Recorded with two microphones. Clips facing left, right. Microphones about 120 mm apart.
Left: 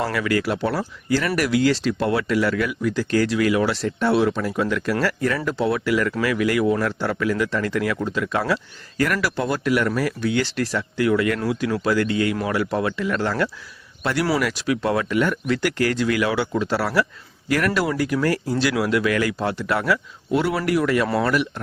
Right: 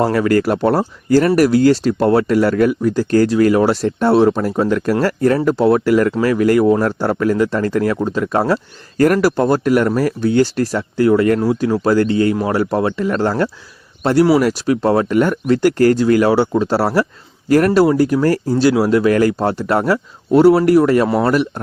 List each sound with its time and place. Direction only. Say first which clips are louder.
0.0 s speech: right 8 dB; 40° right (ahead or behind)